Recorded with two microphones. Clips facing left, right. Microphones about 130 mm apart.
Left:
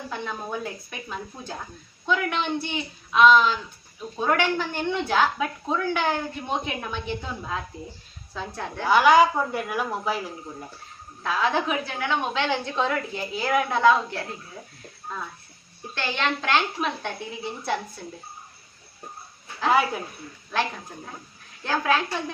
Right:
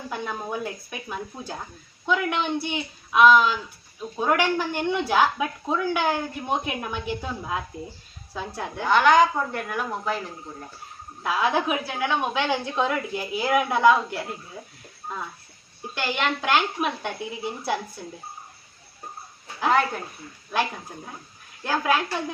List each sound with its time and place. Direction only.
0.1 s speech: 10° right (ahead or behind)
8.8 s speech: 5° left (ahead or behind)
11.2 s speech: 15° right (ahead or behind)
16.0 s speech: 10° right (ahead or behind)
19.7 s speech: 5° left (ahead or behind)
21.6 s speech: 10° right (ahead or behind)